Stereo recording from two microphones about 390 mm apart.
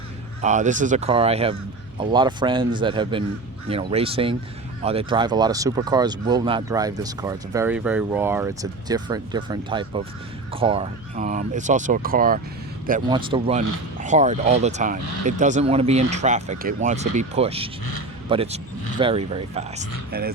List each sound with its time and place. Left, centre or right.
0.4 s speech: centre